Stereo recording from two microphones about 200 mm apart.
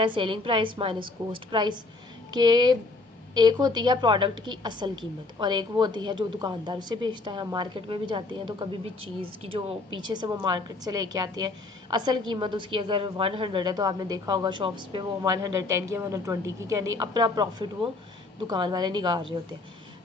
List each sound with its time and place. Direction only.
0.0 s a woman's voice: 25° right (ahead or behind)